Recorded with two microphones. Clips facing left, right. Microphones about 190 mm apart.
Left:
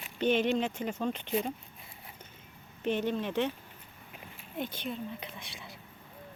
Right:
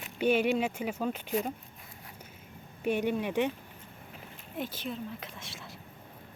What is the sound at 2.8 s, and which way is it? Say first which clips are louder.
Speech: right 1 dB; 10° right (ahead or behind).